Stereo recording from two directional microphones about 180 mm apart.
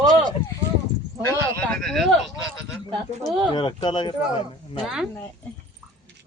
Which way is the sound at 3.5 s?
25° left (ahead or behind).